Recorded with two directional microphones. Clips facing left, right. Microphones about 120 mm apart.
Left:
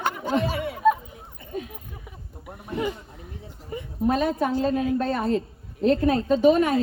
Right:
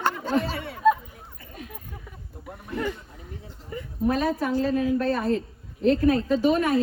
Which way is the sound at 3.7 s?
20° left (ahead or behind).